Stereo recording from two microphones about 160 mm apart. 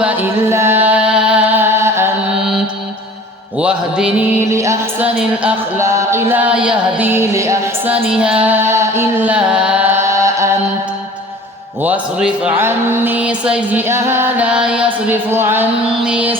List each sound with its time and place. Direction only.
0.0 s chant: 15° right (ahead or behind)
3.6 s speech: 5° right (ahead or behind)
4.5 s speech: 20° right (ahead or behind)
8.1 s carnatic music: 5° right (ahead or behind)
11.8 s speech: 10° right (ahead or behind)